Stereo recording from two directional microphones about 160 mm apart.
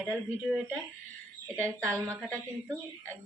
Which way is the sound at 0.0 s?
5° right (ahead or behind).